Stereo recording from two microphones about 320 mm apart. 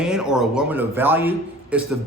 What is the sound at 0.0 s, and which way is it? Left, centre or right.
A man's voice, centre.